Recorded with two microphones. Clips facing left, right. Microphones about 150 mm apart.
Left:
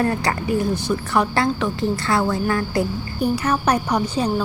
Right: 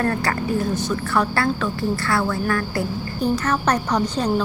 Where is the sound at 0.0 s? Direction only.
10° left (ahead or behind).